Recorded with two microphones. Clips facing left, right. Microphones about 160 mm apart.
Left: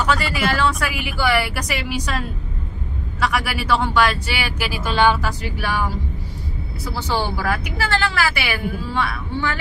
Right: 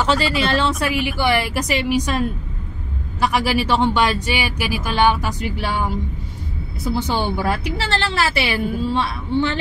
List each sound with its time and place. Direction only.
0.0 s speech: 25° right (ahead or behind)